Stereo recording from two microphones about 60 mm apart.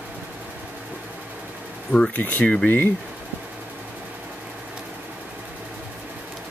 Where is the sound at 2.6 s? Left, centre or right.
Left.